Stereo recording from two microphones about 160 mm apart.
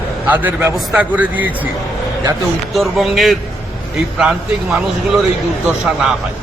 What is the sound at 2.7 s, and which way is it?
Speech, centre (ahead or behind).